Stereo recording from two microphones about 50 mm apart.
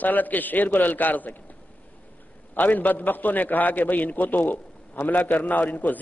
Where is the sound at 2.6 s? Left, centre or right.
Left.